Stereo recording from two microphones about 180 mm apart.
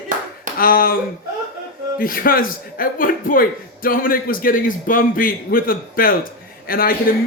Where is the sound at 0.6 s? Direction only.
55° left (ahead or behind).